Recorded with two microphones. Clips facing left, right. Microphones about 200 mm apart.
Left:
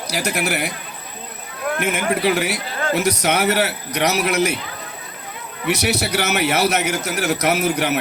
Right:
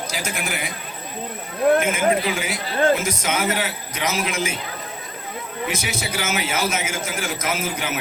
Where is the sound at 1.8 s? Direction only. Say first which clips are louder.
Even; 65° left (ahead or behind).